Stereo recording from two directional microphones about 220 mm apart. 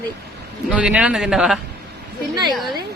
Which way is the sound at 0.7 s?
5° right (ahead or behind).